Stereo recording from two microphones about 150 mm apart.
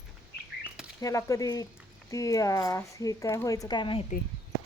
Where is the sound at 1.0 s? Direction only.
20° left (ahead or behind).